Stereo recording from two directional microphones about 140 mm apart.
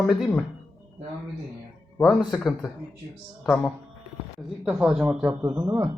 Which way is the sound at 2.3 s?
5° left (ahead or behind).